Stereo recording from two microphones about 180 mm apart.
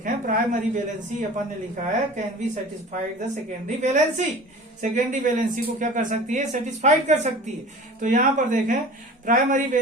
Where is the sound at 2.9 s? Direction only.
45° right (ahead or behind).